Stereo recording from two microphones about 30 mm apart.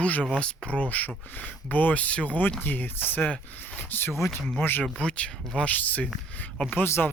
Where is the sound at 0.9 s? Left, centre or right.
Left.